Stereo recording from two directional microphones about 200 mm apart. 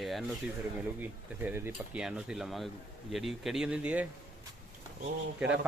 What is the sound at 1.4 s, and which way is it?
Speech, 10° right (ahead or behind).